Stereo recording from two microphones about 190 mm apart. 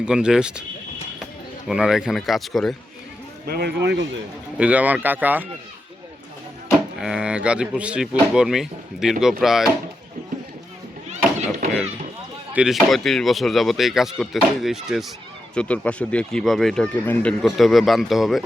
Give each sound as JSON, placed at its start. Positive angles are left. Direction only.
{"t": 0.0, "sound": "speech", "side_deg": -5}
{"t": 1.6, "sound": "speech", "side_deg": -5}
{"t": 3.4, "sound": "speech", "side_deg": -55}
{"t": 4.5, "sound": "speech", "side_deg": -5}
{"t": 6.7, "sound": "speech", "side_deg": -5}
{"t": 12.5, "sound": "speech", "side_deg": 0}